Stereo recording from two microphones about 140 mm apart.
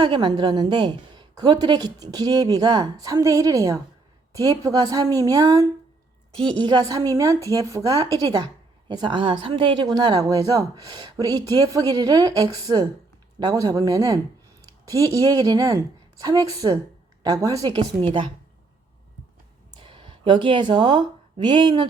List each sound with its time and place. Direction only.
0.0 s a woman's voice: 30° right (ahead or behind)
19.7 s speech: 40° right (ahead or behind)